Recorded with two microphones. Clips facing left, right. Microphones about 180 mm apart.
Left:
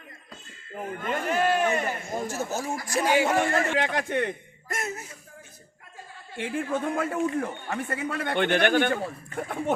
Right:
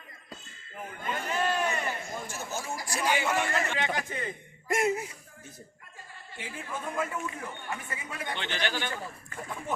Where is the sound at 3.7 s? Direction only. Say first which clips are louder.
Left 7 dB; 70° left (ahead or behind).